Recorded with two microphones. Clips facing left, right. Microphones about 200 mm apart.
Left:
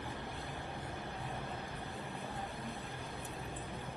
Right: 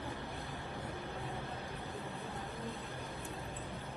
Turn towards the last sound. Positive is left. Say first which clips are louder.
# right 1 dB
turn(degrees=-15)  # may be behind; listen again after turning